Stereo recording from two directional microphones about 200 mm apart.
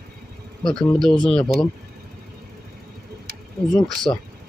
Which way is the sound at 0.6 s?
Centre (ahead or behind).